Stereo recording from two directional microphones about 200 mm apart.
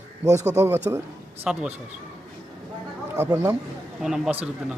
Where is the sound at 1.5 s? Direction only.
5° right (ahead or behind).